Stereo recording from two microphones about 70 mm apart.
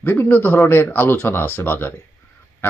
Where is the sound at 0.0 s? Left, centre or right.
Left.